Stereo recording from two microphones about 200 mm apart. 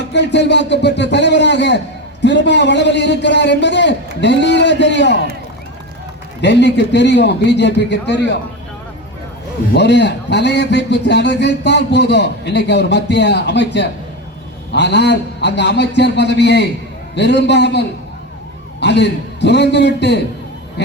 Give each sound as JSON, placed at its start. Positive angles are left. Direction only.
{"t": 0.1, "sound": "a man's voice", "side_deg": 60}
{"t": 6.4, "sound": "a man's voice", "side_deg": 60}
{"t": 9.7, "sound": "a man's voice", "side_deg": 60}